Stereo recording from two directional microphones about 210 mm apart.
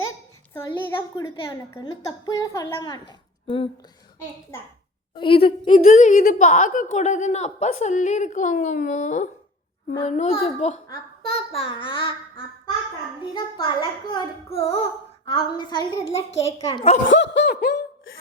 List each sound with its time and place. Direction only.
0.5 s a child's voice: 10° left (ahead or behind)
5.1 s a child's voice: 25° left (ahead or behind)
5.7 s a woman's voice: 35° left (ahead or behind)
13.3 s a child's voice: 20° left (ahead or behind)
17.1 s laughter: 55° left (ahead or behind)